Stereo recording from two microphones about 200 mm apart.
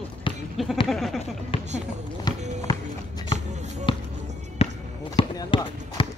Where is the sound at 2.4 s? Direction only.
35° right (ahead or behind).